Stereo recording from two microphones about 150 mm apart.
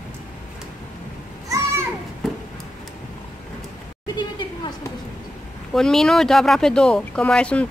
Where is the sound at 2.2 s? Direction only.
Centre (ahead or behind).